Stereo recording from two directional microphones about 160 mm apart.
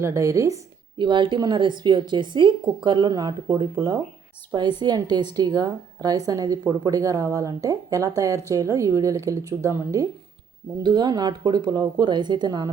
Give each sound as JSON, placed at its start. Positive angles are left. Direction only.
{"t": 0.0, "sound": "a woman's voice", "side_deg": -20}